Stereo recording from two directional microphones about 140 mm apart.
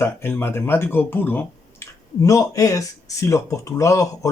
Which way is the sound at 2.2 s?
25° left (ahead or behind).